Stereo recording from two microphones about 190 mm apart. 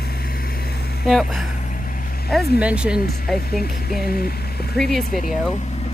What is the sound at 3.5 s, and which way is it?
Speech, 50° left (ahead or behind).